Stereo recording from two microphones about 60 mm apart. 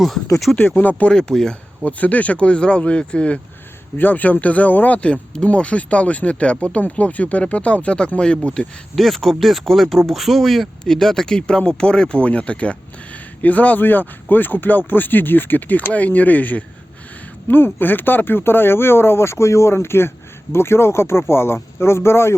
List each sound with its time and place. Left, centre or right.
0.8 s speech: left
1.1 s speech: centre
1.8 s speech: left
3.9 s speech: left
4.9 s speech: centre
9.0 s speech: centre; by 22.4 s left